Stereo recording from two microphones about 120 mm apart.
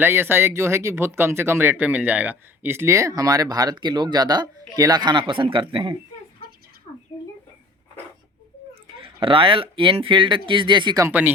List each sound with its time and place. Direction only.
0.0 s speech: 20° right (ahead or behind); by 6.0 s 45° right (ahead or behind)
9.0 s speech: 45° right (ahead or behind)
11.1 s speech: 15° right (ahead or behind)